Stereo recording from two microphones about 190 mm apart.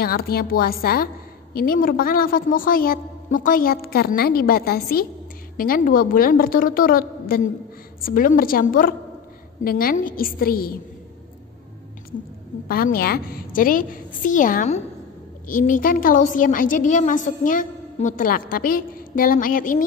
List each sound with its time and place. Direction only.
0.0 s a woman's voice: 55° left (ahead or behind)
12.6 s a woman's voice: 50° left (ahead or behind)